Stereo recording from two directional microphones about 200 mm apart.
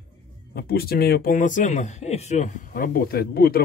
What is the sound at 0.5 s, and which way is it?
Speech, 50° left (ahead or behind).